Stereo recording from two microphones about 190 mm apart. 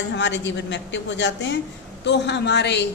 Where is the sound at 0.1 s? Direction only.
70° left (ahead or behind).